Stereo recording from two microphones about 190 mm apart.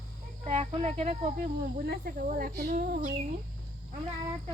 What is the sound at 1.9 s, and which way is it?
A woman's voice, 50° right (ahead or behind).